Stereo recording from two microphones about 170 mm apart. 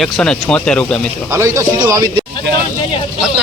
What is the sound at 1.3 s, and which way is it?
Speech, 15° right (ahead or behind).